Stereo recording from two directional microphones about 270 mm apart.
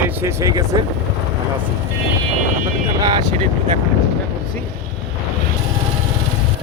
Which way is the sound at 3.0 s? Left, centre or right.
Centre.